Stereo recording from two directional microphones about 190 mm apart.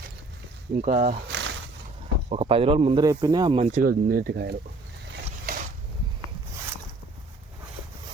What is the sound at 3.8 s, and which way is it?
Speech, 50° right (ahead or behind).